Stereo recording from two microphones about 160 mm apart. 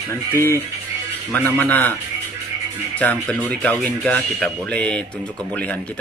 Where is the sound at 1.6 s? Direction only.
10° left (ahead or behind).